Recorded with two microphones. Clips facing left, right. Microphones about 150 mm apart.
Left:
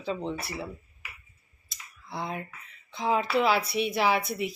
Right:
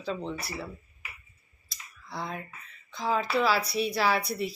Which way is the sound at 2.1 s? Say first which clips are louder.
Left 2 dB; 25° left (ahead or behind).